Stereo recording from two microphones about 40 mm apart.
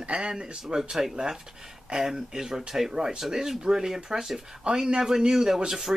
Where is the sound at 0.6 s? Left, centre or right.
Centre.